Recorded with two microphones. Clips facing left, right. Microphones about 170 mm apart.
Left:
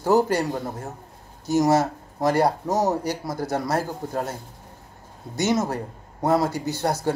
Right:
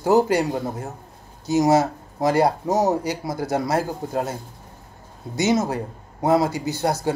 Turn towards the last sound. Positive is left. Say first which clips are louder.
# right 1 dB
turn(degrees=-10)  # may be behind; listen again after turning